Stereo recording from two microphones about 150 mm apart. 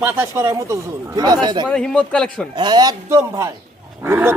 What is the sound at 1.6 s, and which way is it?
Speech, 5° left (ahead or behind).